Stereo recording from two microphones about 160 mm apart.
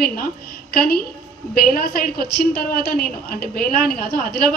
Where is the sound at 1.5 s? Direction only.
70° left (ahead or behind).